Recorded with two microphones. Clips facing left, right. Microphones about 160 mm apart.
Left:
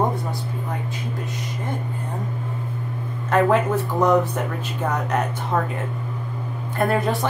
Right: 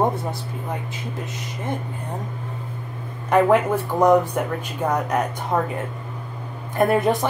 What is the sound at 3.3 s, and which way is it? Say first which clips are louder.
Speech: right 2 dB; 10° right (ahead or behind).